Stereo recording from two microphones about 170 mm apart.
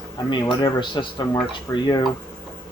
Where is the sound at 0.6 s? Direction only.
25° left (ahead or behind).